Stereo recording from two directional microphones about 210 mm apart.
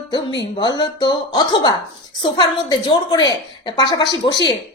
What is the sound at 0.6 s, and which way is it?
A woman's voice, 20° left (ahead or behind).